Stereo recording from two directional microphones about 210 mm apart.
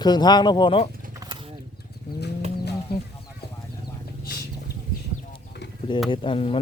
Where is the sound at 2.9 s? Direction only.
50° left (ahead or behind).